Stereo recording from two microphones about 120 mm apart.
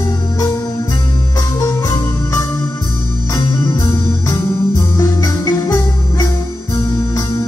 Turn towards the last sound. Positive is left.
turn(degrees=30)  # may be behind; listen again after turning